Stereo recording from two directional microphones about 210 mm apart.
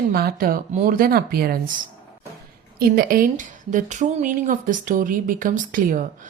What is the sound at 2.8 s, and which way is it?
A woman's voice, 45° right (ahead or behind).